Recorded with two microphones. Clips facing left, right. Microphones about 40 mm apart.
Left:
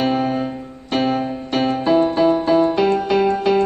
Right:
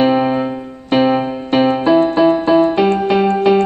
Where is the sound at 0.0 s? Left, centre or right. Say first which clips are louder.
Right 5 dB; centre.